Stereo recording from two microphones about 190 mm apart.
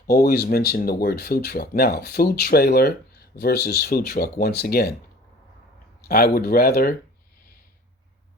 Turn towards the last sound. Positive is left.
turn(degrees=55)  # may be behind; listen again after turning